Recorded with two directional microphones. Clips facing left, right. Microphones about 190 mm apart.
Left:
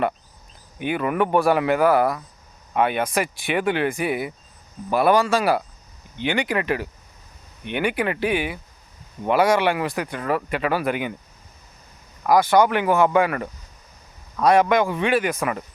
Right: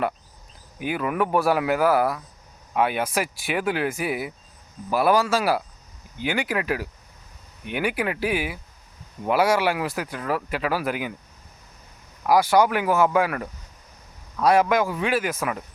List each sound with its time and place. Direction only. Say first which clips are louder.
0.8 s speech: left 2 dB; 5° right (ahead or behind)
12.2 s speech: left 2 dB; 10° right (ahead or behind)